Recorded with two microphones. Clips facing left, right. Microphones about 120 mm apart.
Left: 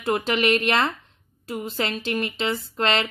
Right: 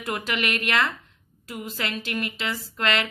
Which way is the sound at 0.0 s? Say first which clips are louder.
Left 6 dB; 25° left (ahead or behind).